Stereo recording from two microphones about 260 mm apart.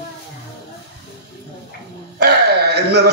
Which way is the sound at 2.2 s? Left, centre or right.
Right.